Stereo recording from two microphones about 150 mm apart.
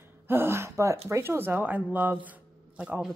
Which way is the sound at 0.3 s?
15° right (ahead or behind).